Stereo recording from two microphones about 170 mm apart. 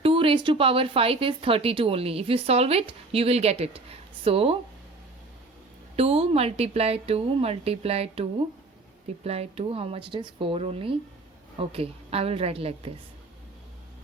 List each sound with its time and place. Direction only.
0.0 s speech: 30° right (ahead or behind)
6.0 s speech: 35° right (ahead or behind)